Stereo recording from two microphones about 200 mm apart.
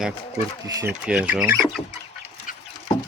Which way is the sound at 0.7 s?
15° right (ahead or behind).